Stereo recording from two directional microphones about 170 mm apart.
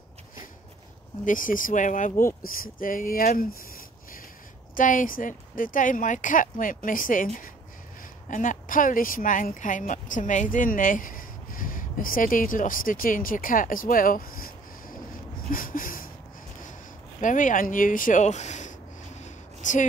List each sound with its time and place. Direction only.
1.2 s speech: 50° left (ahead or behind)
4.7 s speech: 50° left (ahead or behind)
8.3 s speech: 50° left (ahead or behind)
15.5 s a sound: 55° left (ahead or behind)
17.2 s speech: 50° left (ahead or behind)
19.2 s a sound: 45° left (ahead or behind)